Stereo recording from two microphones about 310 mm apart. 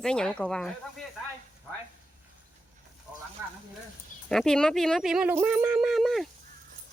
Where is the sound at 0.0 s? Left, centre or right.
Centre.